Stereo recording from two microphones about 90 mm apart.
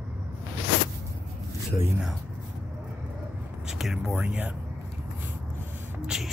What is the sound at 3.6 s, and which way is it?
Speech, 5° right (ahead or behind).